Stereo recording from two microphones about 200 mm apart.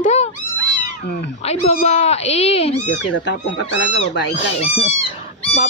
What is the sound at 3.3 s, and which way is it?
Speech, 65° left (ahead or behind).